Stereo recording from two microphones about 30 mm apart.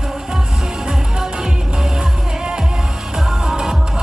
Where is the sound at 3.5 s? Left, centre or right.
Centre.